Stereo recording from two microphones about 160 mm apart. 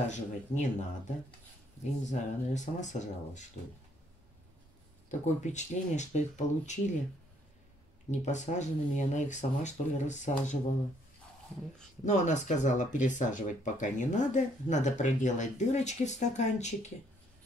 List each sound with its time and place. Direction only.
0.1 s speech: 50° left (ahead or behind)
5.2 s speech: 45° left (ahead or behind)
8.1 s speech: 45° left (ahead or behind)
12.0 s speech: 50° left (ahead or behind)